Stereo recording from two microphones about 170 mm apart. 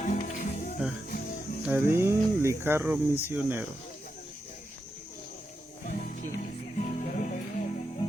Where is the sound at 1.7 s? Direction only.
15° right (ahead or behind).